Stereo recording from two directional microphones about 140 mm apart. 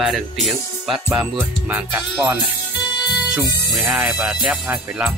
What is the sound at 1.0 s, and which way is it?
Speech, 10° right (ahead or behind).